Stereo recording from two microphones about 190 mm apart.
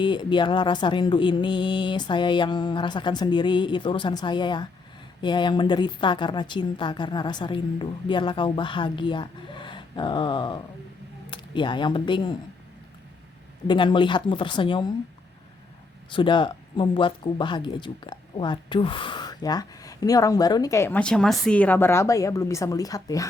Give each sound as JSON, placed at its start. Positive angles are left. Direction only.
{"t": 0.0, "sound": "speech", "side_deg": 25}
{"t": 13.7, "sound": "speech", "side_deg": 25}
{"t": 16.1, "sound": "speech", "side_deg": 25}